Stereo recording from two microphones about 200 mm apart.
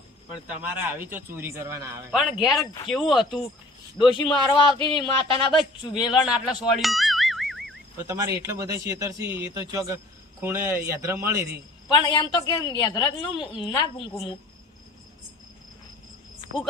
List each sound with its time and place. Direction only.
0.5 s a man's voice: 10° right (ahead or behind)
3.9 s a woman's voice: 25° left (ahead or behind)
5.9 s speech: 5° right (ahead or behind)
8.0 s a man's voice: 15° right (ahead or behind)
11.9 s a woman's voice: 20° left (ahead or behind)